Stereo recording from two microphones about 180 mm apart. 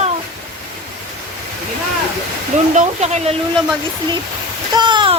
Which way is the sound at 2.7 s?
40° right (ahead or behind).